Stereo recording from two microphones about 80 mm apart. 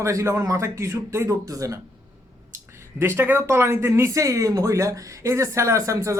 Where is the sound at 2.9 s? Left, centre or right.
Right.